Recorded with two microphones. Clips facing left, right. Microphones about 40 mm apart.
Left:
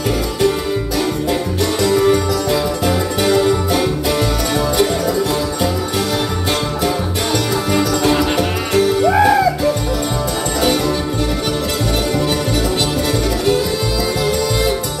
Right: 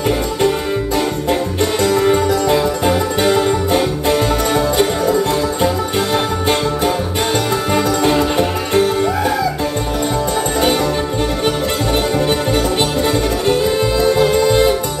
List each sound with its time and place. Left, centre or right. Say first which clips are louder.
1.9 s music: even; right
8.2 s music: right 1 dB; right
14.0 s music: right 7 dB; right